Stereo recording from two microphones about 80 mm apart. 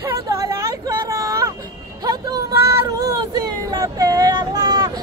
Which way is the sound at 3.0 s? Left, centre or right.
Right.